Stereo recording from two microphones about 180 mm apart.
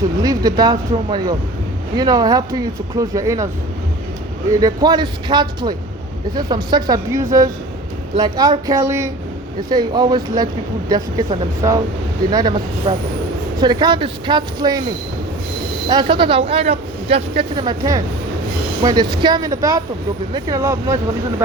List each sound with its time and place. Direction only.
0.2 s speech: 20° right (ahead or behind)
4.6 s speech: 20° right (ahead or behind)
15.9 s speech: 25° right (ahead or behind)